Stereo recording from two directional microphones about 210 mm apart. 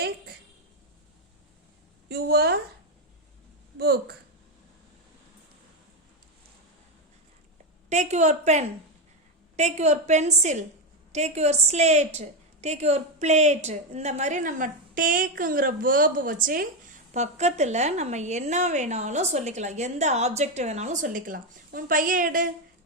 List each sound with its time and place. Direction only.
2.0 s a sound: 50° right (ahead or behind)
3.8 s speech: 50° right (ahead or behind)
7.9 s a woman's voice: 35° right (ahead or behind)